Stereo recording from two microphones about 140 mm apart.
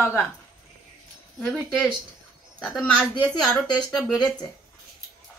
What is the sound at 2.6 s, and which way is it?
A woman's voice, 5° left (ahead or behind).